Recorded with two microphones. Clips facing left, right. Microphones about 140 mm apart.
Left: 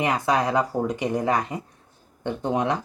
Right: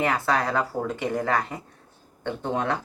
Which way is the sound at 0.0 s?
15° left (ahead or behind).